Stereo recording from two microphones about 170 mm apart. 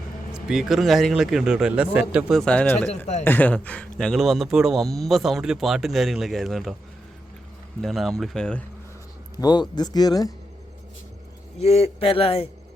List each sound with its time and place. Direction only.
0.3 s speech: 5° right (ahead or behind)
7.8 s speech: centre (ahead or behind)
9.3 s a man's voice: 25° left (ahead or behind)
11.6 s speech: 40° left (ahead or behind)